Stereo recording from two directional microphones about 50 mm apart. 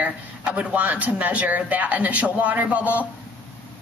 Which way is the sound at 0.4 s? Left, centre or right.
Right.